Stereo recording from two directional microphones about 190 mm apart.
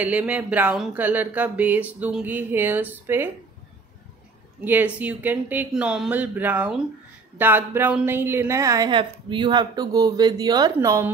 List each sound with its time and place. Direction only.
0.0 s a woman's voice: 5° right (ahead or behind)
4.6 s a woman's voice: 10° right (ahead or behind)